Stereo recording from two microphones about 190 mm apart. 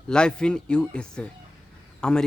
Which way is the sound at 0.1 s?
5° left (ahead or behind).